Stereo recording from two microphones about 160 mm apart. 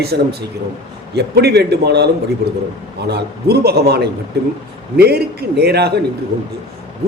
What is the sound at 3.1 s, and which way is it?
A man's voice, 85° right.